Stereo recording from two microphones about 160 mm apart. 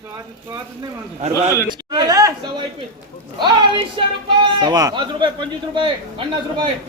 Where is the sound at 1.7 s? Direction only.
25° right (ahead or behind).